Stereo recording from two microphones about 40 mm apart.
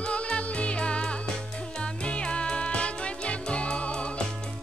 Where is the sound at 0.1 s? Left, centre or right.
Left.